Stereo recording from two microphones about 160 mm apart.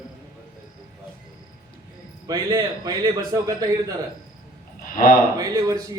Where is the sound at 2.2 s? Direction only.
25° right (ahead or behind).